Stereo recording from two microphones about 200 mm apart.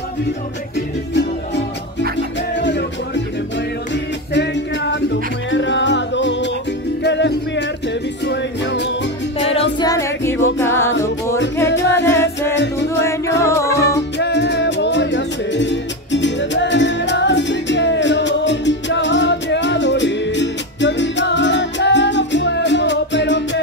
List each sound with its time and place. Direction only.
0.7 s music: 60° left (ahead or behind)
9.5 s music: 30° left (ahead or behind)
9.8 s music: 15° left (ahead or behind)
11.6 s music: 60° left (ahead or behind)
12.8 s music: 15° left (ahead or behind)
14.1 s music: 60° left (ahead or behind)